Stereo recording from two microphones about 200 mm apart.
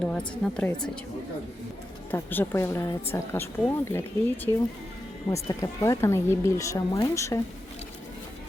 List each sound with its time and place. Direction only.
0.0 s a woman's voice: 5° left (ahead or behind)
2.0 s speech: 10° left (ahead or behind)